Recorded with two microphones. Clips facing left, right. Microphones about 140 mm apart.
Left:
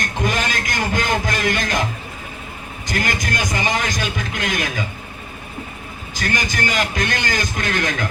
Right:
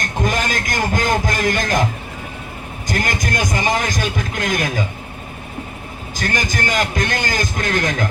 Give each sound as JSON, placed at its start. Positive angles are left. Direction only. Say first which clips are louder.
{"t": 0.0, "sound": "heart sounds", "louder": "right 1 dB", "side_deg": -45}
{"t": 2.8, "sound": "a man's voice", "louder": "right 1 dB", "side_deg": -45}
{"t": 6.1, "sound": "a man's voice", "louder": "right 1 dB", "side_deg": -45}